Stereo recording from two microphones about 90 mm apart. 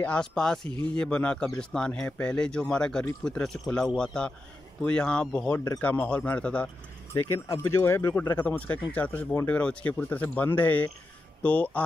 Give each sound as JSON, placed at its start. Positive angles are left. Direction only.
{"t": 0.0, "sound": "speech", "side_deg": 10}
{"t": 5.5, "sound": "speech", "side_deg": 30}
{"t": 5.8, "sound": "speech", "side_deg": 20}
{"t": 7.2, "sound": "speech", "side_deg": 35}
{"t": 8.4, "sound": "speech", "side_deg": 15}